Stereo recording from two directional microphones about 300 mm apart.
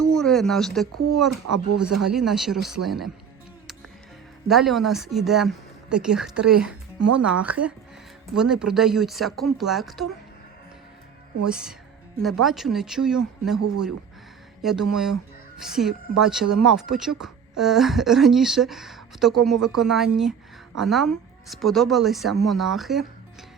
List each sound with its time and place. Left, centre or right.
0.0 s speech: centre
1.5 s speech: right
2.1 s speech: centre
4.4 s speech: centre
7.0 s speech: right
7.3 s speech: centre
11.4 s speech: centre